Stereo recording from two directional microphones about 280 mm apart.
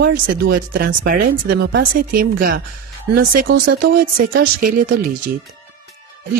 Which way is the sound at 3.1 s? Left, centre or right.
Right.